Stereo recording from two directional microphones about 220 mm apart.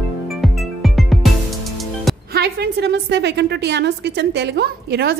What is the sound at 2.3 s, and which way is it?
A woman's voice, 45° right (ahead or behind).